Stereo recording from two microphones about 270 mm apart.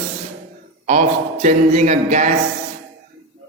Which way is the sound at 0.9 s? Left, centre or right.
Right.